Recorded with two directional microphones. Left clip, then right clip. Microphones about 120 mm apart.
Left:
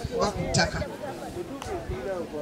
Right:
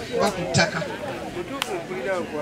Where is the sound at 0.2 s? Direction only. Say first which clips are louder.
Right 4 dB; 25° left (ahead or behind).